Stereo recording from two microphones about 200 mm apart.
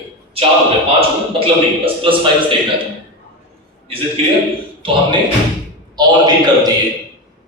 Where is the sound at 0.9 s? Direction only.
25° right (ahead or behind).